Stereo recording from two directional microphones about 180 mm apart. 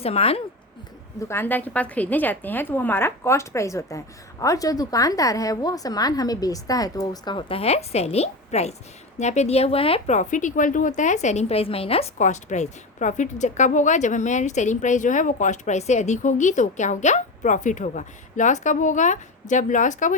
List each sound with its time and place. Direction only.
0.0 s a woman's voice: 35° left (ahead or behind)
1.2 s a woman's voice: 15° left (ahead or behind); by 20.1 s 45° left (ahead or behind)